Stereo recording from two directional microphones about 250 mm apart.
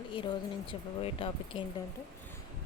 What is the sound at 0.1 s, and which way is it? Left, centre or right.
A woman's voice, centre.